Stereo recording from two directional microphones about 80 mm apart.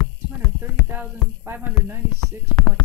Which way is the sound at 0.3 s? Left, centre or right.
Right.